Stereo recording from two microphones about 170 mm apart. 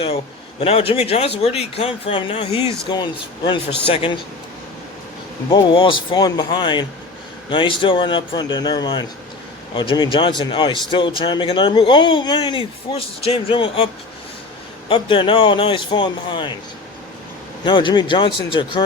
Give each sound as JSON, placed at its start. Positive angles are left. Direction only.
{"t": 0.6, "sound": "speech", "side_deg": 35}
{"t": 5.5, "sound": "a man's voice", "side_deg": 30}
{"t": 14.8, "sound": "a man's voice", "side_deg": 30}
{"t": 17.7, "sound": "a man's voice", "side_deg": 30}